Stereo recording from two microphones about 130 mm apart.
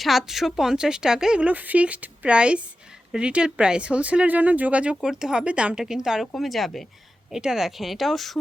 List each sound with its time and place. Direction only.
0.0 s speech: centre (ahead or behind)